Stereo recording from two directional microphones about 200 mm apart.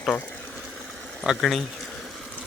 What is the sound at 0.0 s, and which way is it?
Boiling, 10° left (ahead or behind).